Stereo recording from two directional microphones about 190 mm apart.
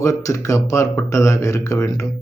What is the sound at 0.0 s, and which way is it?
A man's voice, 15° left (ahead or behind).